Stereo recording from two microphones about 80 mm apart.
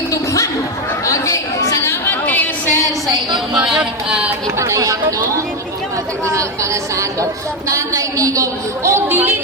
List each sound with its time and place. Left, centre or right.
1.0 s chatter: left
2.2 s a sound: left
3.7 s music: centre
4.5 s a woman's voice: right
7.7 s a woman's voice: right
9.0 s chatter: right